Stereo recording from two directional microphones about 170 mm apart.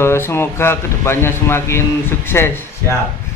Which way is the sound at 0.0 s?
15° left (ahead or behind).